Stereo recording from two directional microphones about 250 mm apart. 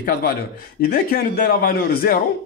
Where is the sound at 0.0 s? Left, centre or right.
Left.